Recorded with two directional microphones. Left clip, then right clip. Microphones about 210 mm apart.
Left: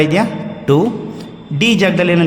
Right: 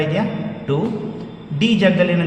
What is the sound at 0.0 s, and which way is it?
Speech, 40° left (ahead or behind).